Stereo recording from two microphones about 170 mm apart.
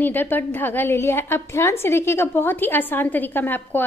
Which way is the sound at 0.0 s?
10° left (ahead or behind).